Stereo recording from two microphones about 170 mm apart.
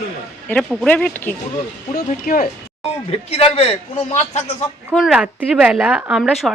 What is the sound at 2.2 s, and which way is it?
Speech, 55° left (ahead or behind).